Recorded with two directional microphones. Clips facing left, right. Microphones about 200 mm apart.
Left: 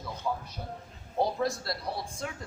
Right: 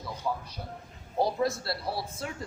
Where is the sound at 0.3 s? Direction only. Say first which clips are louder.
Even; 5° right (ahead or behind).